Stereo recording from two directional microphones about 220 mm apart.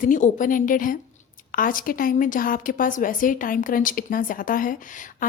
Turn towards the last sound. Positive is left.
turn(degrees=40)  # may be behind; listen again after turning